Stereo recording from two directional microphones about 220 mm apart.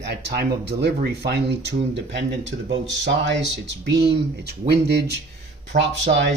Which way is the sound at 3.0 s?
55° right (ahead or behind).